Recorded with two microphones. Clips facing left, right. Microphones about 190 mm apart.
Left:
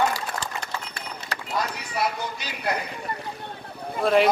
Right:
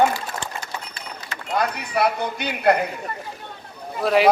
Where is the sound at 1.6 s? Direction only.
60° right (ahead or behind).